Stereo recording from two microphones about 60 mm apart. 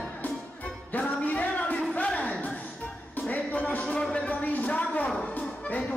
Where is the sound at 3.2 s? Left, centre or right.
Left.